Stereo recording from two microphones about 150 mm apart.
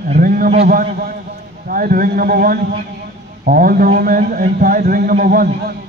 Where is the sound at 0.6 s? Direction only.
80° right.